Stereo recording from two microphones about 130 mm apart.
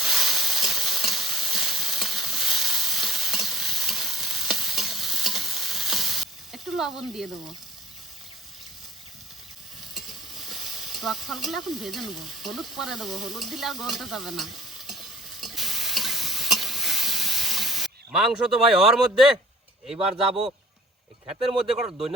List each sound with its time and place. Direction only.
0.0 s stir: 5° right (ahead or behind)
9.9 s stir: centre (ahead or behind)
20.0 s speech: 50° right (ahead or behind)